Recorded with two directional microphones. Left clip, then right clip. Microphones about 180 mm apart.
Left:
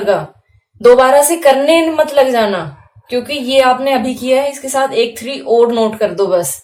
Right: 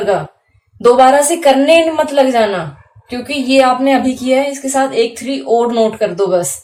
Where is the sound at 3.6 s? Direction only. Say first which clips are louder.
Even; 40° left (ahead or behind).